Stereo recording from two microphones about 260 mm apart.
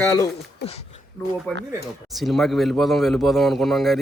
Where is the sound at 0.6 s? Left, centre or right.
Left.